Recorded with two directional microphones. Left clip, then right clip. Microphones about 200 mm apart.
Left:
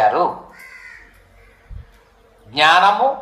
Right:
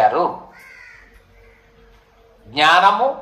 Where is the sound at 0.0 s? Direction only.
10° right (ahead or behind).